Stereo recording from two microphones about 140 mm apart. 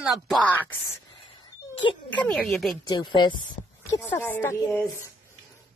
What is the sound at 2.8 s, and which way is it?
Speech, 35° left (ahead or behind).